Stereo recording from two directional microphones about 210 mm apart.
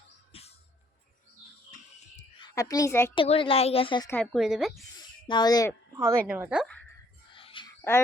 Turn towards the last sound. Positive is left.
turn(degrees=25)  # may be behind; listen again after turning